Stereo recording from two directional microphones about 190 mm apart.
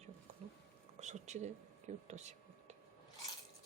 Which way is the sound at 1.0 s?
35° right (ahead or behind).